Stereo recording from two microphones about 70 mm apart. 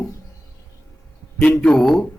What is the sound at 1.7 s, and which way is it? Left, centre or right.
Speech, centre.